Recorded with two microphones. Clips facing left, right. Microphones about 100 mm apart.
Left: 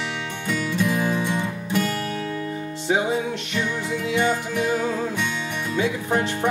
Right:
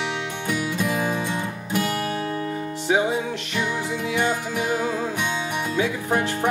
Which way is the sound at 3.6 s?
15° right (ahead or behind).